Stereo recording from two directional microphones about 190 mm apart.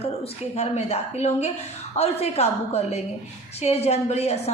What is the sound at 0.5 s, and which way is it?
A woman's voice, 35° left (ahead or behind).